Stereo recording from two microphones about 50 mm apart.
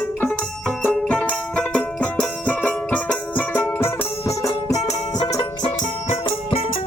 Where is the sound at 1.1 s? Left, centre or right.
Left.